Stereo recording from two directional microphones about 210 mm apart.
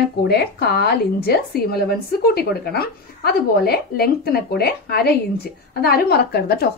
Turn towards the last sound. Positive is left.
turn(degrees=50)  # may be behind; listen again after turning